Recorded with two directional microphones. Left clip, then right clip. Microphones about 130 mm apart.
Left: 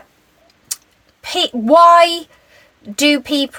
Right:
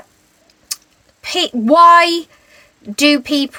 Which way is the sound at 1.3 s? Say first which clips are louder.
Left 1 dB; 15° right (ahead or behind).